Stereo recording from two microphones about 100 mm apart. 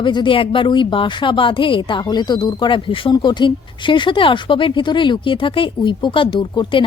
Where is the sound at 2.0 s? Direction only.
45° left (ahead or behind).